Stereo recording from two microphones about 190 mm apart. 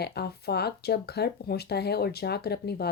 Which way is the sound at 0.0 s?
55° left (ahead or behind).